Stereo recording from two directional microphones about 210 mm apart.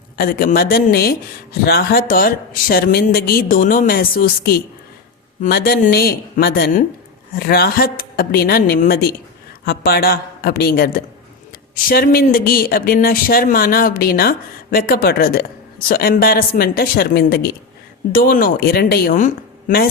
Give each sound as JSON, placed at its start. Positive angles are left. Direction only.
{"t": 0.2, "sound": "speech", "side_deg": 45}